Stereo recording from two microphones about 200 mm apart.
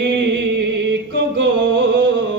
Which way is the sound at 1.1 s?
65° right (ahead or behind).